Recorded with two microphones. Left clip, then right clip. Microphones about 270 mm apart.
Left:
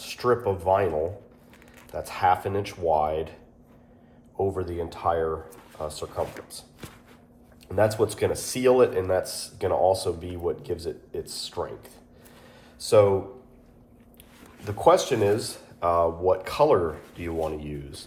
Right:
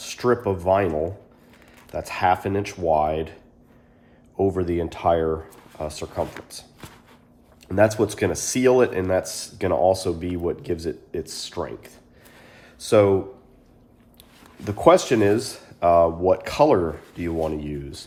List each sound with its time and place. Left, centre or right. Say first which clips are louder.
0.0 s speech: right 2 dB; right
4.4 s speech: right 5 dB; right
7.7 s speech: right 4 dB; right
14.6 s speech: right 4 dB; right